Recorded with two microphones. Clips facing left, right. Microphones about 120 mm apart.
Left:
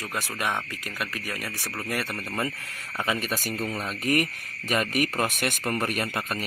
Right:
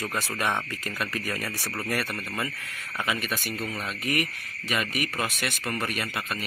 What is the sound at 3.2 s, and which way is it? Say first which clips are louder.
Speech: left 2 dB; 40° left (ahead or behind).